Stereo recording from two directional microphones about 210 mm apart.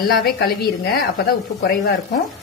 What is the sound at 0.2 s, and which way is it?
A woman's voice, 45° left (ahead or behind).